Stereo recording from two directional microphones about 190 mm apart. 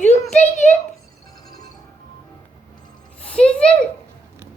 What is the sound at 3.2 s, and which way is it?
Speech, 5° left (ahead or behind).